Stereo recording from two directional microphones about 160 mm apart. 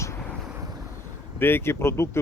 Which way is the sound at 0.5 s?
20° right (ahead or behind).